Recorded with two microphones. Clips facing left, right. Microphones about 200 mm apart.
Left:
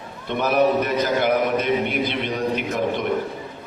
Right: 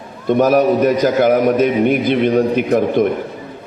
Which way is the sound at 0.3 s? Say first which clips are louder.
Right 7 dB; 45° right (ahead or behind).